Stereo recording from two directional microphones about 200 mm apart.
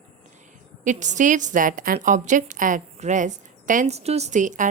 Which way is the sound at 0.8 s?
40° right (ahead or behind).